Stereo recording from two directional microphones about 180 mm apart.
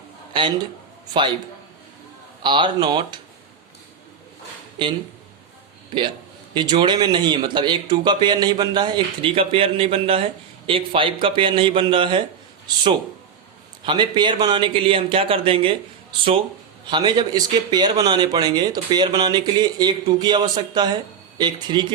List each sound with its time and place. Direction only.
2.4 s a man's voice: 25° right (ahead or behind)
4.8 s a man's voice: 25° right (ahead or behind)
6.5 s a man's voice: 25° right (ahead or behind)
16.8 s a man's voice: 25° right (ahead or behind)